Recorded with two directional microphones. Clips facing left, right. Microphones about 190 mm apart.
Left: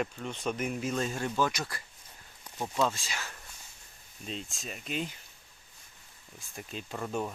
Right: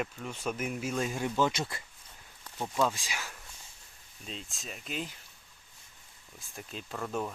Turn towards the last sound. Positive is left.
turn(degrees=10)  # may be behind; listen again after turning